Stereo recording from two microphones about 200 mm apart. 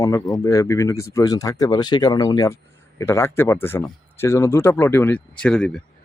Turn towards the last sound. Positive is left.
turn(degrees=5)  # may be behind; listen again after turning